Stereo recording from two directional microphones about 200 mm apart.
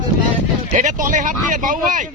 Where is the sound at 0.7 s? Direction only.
40° right (ahead or behind).